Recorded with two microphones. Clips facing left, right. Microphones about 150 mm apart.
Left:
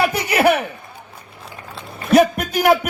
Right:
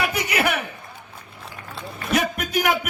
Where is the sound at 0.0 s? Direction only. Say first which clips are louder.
Left 7 dB; 30° left (ahead or behind).